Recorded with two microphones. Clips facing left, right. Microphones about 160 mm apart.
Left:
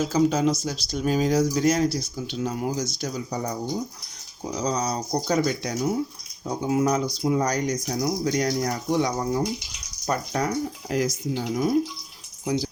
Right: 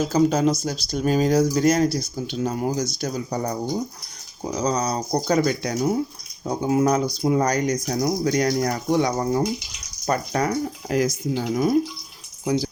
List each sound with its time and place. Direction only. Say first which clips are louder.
0.0 s speech: right 2 dB; 55° right (ahead or behind)
4.8 s speech: right 2 dB; 75° right (ahead or behind)
5.1 s speech: right 3 dB; 50° right (ahead or behind)
10.1 s speech: right 3 dB; 75° right (ahead or behind)